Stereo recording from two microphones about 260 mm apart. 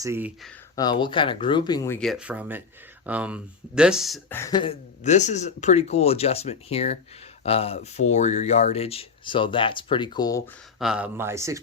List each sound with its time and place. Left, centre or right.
0.0 s speech: centre
0.8 s speech: centre
10.8 s speech: centre